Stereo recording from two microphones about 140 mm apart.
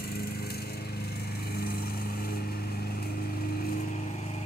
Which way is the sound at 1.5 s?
90° left.